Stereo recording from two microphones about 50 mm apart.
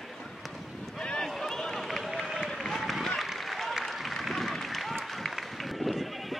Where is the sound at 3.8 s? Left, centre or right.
Centre.